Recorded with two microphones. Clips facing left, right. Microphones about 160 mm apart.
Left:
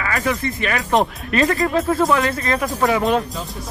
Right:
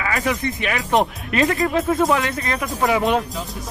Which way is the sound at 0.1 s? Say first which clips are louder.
Left 2 dB; 20° right (ahead or behind).